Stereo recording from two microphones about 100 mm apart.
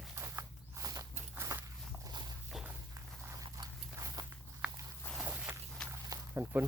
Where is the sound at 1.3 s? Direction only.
30° right (ahead or behind).